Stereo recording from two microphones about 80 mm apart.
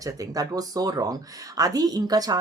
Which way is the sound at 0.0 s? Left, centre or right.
Right.